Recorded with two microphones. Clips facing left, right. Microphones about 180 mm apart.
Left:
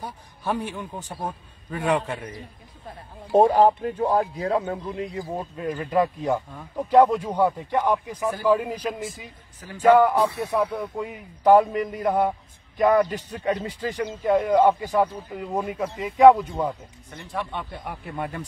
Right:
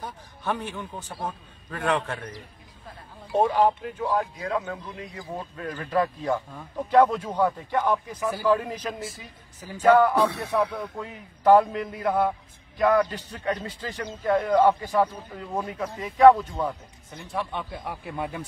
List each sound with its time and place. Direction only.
0.0 s a man's voice: 15° left (ahead or behind)
3.3 s a man's voice: 40° left (ahead or behind); by 10.9 s centre (ahead or behind)
11.0 s a man's voice: 15° left (ahead or behind)
12.0 s a man's voice: 15° left (ahead or behind)
17.1 s a man's voice: centre (ahead or behind)